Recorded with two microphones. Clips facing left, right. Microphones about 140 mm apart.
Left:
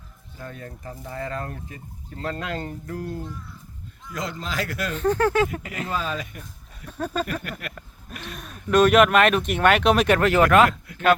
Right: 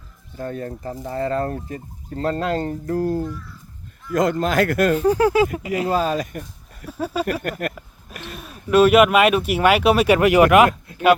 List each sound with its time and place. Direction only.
0.3 s speech: 40° right (ahead or behind)
4.1 s speech: 50° right (ahead or behind)
4.9 s speech: 10° right (ahead or behind)
5.9 s speech: 40° right (ahead or behind)
6.8 s speech: 5° right (ahead or behind)